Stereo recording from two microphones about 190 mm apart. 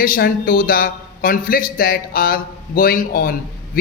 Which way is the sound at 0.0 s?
50° left (ahead or behind).